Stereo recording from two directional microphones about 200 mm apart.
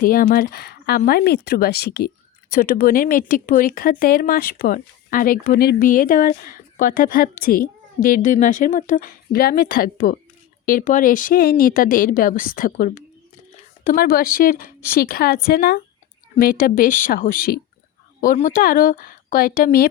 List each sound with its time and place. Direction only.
0.0 s speech: 45° left (ahead or behind)